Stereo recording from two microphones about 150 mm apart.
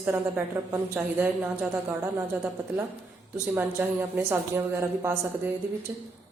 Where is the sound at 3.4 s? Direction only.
10° right (ahead or behind).